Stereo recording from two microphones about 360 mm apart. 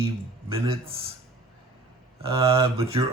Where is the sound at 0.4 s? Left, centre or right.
Centre.